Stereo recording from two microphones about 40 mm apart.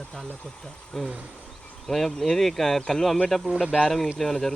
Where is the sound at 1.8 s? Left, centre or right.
Centre.